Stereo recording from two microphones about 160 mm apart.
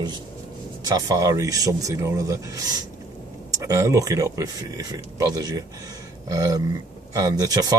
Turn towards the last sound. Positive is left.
turn(degrees=-25)  # may be behind; listen again after turning